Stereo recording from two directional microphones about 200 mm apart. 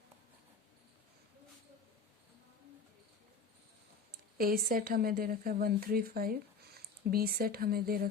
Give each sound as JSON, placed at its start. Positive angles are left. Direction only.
{"t": 4.1, "sound": "speech", "side_deg": -45}